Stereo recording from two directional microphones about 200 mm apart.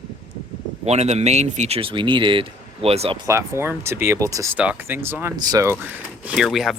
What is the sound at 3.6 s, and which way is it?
Speech, 10° right (ahead or behind).